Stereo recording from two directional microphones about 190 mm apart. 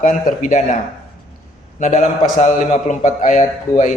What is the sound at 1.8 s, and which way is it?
A man's voice, 40° left (ahead or behind).